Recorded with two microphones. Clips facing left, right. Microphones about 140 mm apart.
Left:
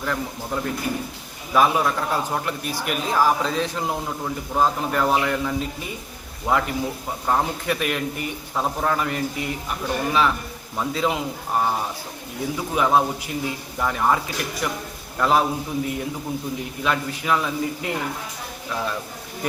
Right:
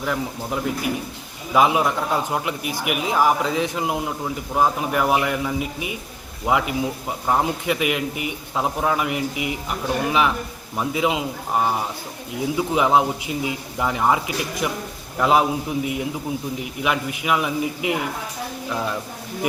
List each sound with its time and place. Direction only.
0.0 s a man's voice: 10° right (ahead or behind)